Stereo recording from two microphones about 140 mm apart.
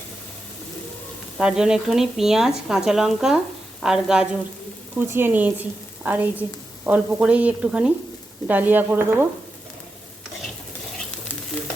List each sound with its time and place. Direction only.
1.4 s speech: 5° right (ahead or behind)
4.9 s a woman's voice: 15° right (ahead or behind)